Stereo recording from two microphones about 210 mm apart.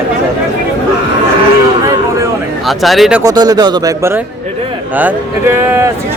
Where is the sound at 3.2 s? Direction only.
15° right (ahead or behind).